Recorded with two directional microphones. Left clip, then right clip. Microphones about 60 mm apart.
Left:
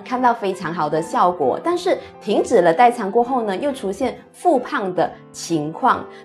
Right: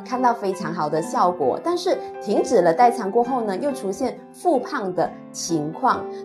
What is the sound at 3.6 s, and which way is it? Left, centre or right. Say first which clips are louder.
Speech: left 2 dB; left.